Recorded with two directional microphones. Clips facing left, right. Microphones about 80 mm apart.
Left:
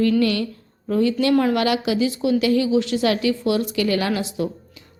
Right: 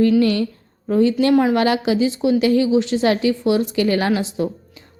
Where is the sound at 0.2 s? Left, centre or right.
Right.